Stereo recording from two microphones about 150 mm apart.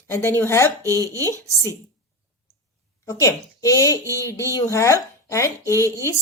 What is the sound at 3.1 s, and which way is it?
A woman's voice, 20° left (ahead or behind).